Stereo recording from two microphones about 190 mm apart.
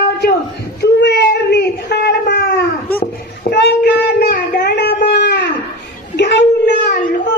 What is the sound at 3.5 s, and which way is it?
Child singing, 60° left (ahead or behind).